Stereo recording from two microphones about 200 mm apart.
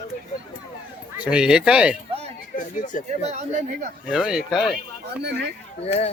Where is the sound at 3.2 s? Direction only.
35° right (ahead or behind).